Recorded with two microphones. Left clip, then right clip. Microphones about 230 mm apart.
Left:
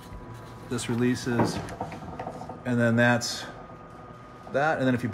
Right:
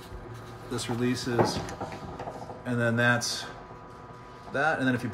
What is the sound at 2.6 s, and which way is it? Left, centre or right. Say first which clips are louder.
Speech: left 3 dB; left.